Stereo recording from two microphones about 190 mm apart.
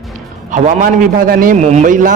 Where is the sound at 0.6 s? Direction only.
45° right (ahead or behind).